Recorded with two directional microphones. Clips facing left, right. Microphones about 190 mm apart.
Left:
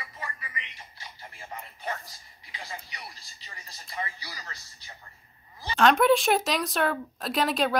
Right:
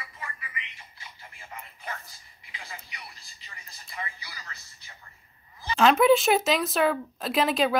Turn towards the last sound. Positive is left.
turn(degrees=0)  # may be behind; listen again after turning